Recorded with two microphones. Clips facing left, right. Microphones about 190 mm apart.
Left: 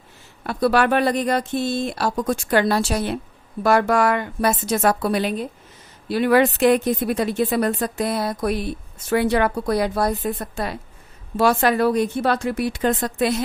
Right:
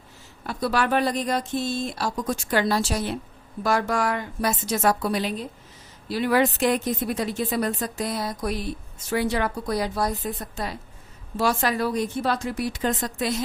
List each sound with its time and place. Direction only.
0.4 s speech: 60° left (ahead or behind)